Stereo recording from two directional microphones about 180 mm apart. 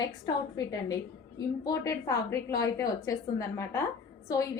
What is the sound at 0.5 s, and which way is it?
A woman's voice, 20° left (ahead or behind).